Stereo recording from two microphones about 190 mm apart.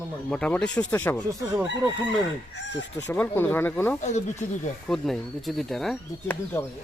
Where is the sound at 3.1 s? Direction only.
10° left (ahead or behind).